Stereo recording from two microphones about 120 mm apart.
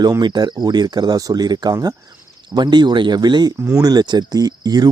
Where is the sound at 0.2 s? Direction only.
40° right (ahead or behind).